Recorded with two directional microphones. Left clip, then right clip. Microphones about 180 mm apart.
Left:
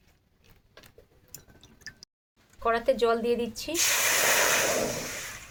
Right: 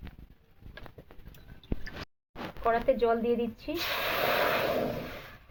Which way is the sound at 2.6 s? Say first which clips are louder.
Left 2 dB; 15° left (ahead or behind).